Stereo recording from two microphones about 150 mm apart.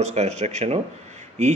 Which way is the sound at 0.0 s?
50° right (ahead or behind).